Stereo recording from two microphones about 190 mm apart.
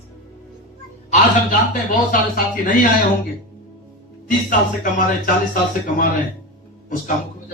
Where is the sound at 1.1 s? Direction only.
45° left (ahead or behind).